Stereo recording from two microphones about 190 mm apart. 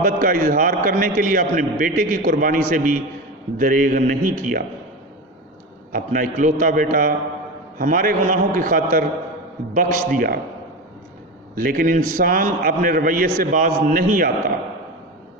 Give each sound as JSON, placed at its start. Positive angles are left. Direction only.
{"t": 0.0, "sound": "a man's voice", "side_deg": -50}
{"t": 5.9, "sound": "a man's voice", "side_deg": -45}
{"t": 11.5, "sound": "a man's voice", "side_deg": -50}